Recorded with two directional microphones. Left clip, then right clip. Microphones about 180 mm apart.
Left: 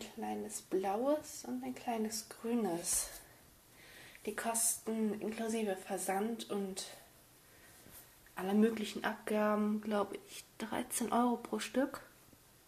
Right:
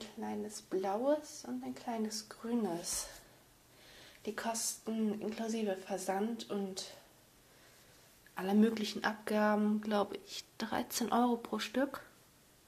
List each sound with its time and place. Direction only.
0.0 s speech: centre (ahead or behind)
4.2 s speech: 10° right (ahead or behind)
8.4 s speech: 15° right (ahead or behind)